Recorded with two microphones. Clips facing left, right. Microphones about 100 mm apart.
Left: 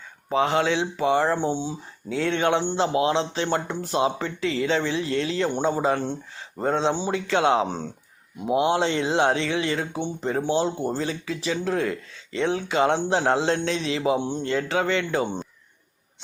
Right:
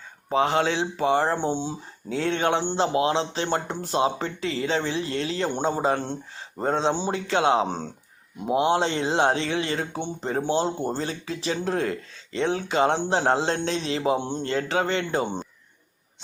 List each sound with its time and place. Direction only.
0.3 s a man's voice: 30° right (ahead or behind)